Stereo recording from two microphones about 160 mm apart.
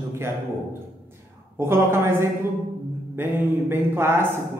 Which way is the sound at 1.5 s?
15° right (ahead or behind).